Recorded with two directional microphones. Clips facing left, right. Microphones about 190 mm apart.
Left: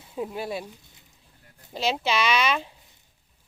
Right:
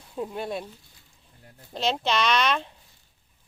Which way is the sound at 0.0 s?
5° left (ahead or behind).